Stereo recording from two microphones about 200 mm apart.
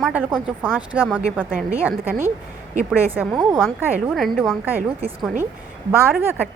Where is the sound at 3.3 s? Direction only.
20° right (ahead or behind).